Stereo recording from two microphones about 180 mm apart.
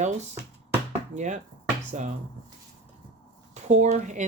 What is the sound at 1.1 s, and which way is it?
Speech, 40° right (ahead or behind).